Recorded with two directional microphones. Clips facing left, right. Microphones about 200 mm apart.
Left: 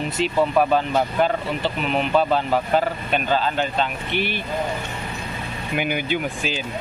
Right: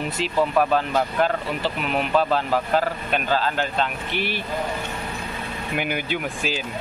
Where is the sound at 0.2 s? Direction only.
Centre (ahead or behind).